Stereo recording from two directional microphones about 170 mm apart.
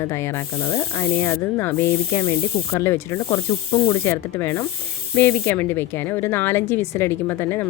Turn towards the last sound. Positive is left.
turn(degrees=15)  # may be behind; listen again after turning